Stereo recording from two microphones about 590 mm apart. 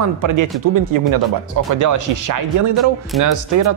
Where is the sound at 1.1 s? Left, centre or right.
Right.